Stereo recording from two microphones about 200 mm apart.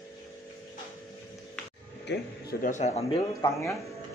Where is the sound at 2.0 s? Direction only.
55° left (ahead or behind).